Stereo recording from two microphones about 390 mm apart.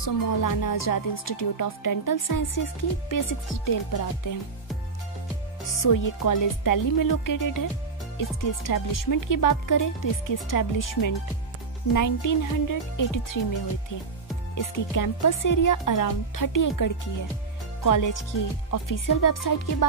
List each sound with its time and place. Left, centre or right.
0.0 s speech: left
5.7 s speech: left
14.6 s speech: left